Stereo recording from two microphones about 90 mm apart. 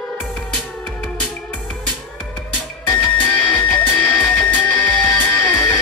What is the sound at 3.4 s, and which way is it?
Music, 15° left (ahead or behind).